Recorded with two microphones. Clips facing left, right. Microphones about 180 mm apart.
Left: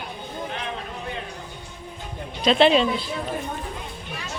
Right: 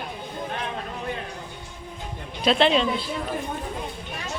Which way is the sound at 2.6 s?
10° left (ahead or behind).